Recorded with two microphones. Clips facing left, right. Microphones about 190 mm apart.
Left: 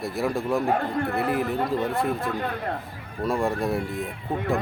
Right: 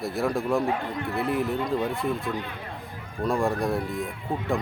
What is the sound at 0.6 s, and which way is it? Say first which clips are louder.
Speech: left 4 dB; 55° left (ahead or behind).